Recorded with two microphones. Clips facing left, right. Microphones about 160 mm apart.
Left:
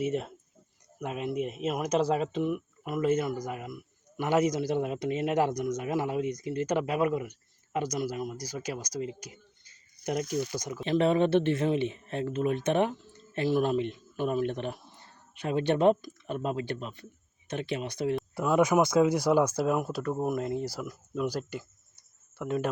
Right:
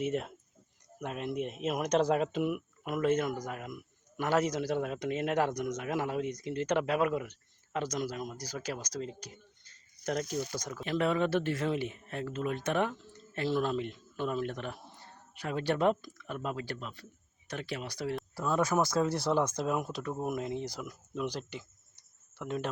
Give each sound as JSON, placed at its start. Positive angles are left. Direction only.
{"t": 0.0, "sound": "speech", "side_deg": 0}
{"t": 10.8, "sound": "speech", "side_deg": 20}